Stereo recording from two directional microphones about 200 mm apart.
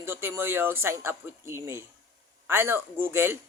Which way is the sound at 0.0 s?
10° right (ahead or behind).